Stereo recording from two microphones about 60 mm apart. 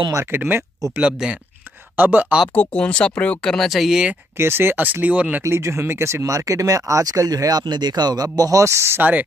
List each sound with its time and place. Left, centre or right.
0.3 s speech: right
0.9 s speech: centre
2.0 s speech: right
2.5 s speech: left
3.4 s speech: centre
4.4 s speech: right
5.5 s speech: right
6.2 s speech: right